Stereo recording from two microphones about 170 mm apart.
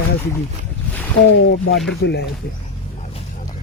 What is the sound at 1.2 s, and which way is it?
Speech, 90° left.